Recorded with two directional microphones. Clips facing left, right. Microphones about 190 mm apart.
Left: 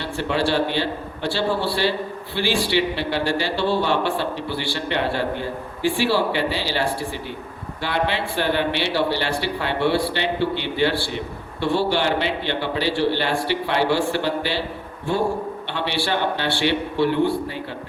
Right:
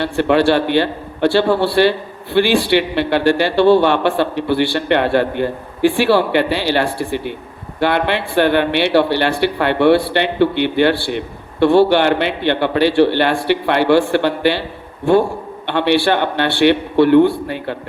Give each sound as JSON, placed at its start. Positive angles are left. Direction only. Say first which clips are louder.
{"t": 0.0, "sound": "a man's voice", "louder": "right 9 dB", "side_deg": -60}
{"t": 15.6, "sound": "a man's voice", "louder": "right 14 dB", "side_deg": -60}